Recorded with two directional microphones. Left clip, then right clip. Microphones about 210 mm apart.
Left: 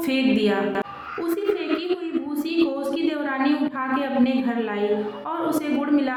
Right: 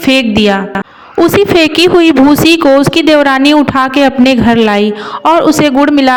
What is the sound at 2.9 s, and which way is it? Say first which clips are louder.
A woman's voice: right 18 dB; 55° right (ahead or behind).